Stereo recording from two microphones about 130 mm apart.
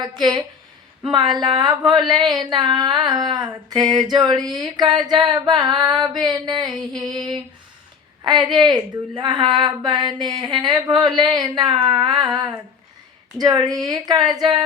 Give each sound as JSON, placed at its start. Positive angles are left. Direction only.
{"t": 0.0, "sound": "speech", "side_deg": -35}